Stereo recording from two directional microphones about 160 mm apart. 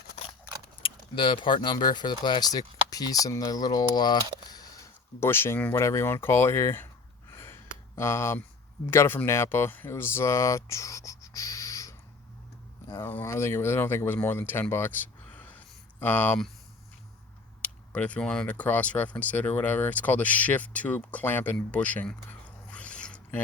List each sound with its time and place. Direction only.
0.8 s speech: 35° left (ahead or behind); by 6.8 s 15° left (ahead or behind)
7.3 s a sound: 15° left (ahead or behind)
8.9 s speech: 15° left (ahead or behind)
17.6 s speech: 10° left (ahead or behind)
22.7 s zipper: 5° left (ahead or behind)